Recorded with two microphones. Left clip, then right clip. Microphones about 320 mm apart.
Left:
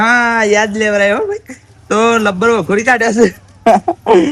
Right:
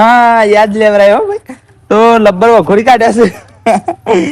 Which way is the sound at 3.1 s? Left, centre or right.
Right.